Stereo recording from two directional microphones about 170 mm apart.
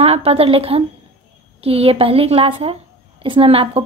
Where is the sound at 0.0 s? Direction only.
35° right (ahead or behind).